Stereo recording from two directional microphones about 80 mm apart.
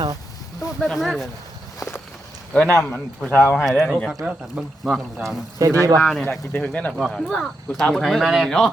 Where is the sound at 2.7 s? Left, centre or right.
Left.